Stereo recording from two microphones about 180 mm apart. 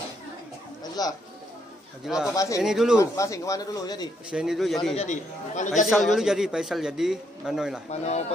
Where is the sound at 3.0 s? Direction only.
15° left (ahead or behind).